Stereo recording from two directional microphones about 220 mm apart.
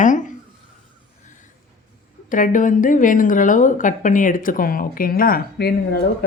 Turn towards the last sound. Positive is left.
turn(degrees=45)  # may be behind; listen again after turning